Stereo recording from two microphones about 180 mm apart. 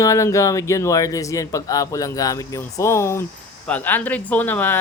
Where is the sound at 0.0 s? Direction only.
15° left (ahead or behind).